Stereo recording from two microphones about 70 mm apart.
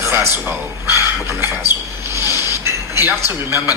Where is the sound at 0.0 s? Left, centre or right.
Right.